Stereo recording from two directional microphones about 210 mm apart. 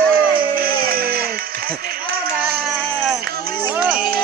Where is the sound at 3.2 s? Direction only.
45° right (ahead or behind).